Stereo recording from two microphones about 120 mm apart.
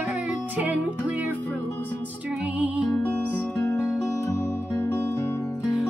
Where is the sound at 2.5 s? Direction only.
10° right (ahead or behind).